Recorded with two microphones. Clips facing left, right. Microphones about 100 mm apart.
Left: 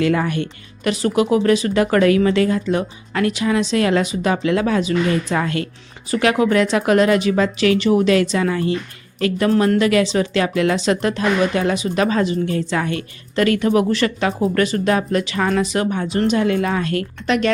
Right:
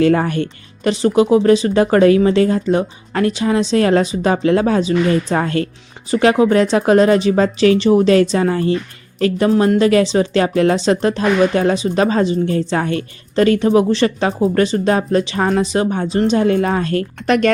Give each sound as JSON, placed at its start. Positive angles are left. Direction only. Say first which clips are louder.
{"t": 0.0, "sound": "speech", "louder": "right 4 dB", "side_deg": -35}
{"t": 17.2, "sound": "speech", "louder": "right 4 dB", "side_deg": -45}